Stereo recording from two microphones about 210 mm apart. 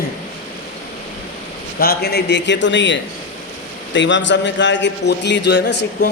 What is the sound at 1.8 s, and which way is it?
A man's voice, 50° left (ahead or behind).